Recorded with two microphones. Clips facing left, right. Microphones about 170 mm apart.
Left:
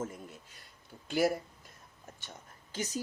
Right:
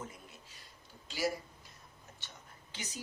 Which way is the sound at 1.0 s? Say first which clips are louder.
Left 7 dB; 55° left (ahead or behind).